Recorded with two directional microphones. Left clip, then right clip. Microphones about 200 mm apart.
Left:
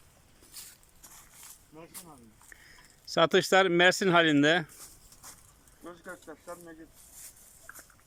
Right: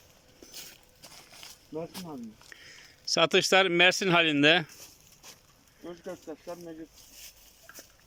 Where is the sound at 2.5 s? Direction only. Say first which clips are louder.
Right 4 dB; centre (ahead or behind).